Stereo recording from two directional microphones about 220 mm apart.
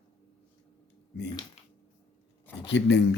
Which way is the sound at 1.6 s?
30° left (ahead or behind).